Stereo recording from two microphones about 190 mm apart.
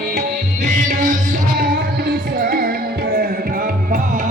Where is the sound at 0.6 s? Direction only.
40° right (ahead or behind).